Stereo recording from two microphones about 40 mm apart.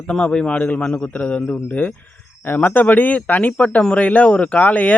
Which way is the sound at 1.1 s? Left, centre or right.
Left.